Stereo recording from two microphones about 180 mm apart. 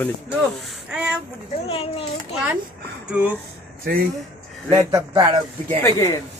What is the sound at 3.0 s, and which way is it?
Speech, 5° right (ahead or behind).